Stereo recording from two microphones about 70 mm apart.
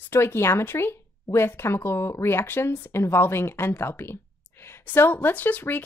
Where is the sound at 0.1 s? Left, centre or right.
Left.